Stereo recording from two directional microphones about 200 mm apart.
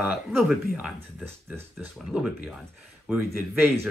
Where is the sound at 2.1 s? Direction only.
5° right (ahead or behind).